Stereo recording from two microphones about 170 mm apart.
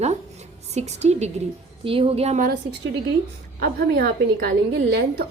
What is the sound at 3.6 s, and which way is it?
A woman's voice, 60° right (ahead or behind).